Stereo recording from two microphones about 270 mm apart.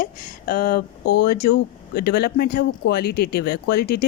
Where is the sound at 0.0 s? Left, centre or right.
Left.